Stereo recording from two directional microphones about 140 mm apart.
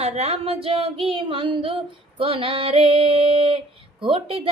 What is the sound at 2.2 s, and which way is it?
Female singing, 40° right (ahead or behind).